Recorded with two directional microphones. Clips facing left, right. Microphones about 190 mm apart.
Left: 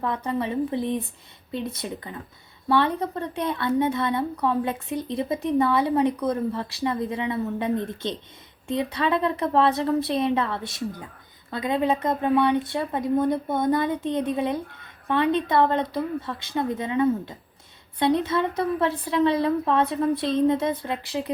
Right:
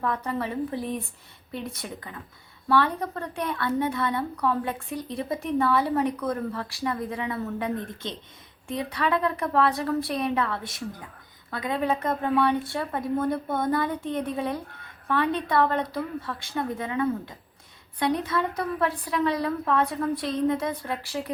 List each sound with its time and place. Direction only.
0.0 s a woman's voice: 20° left (ahead or behind)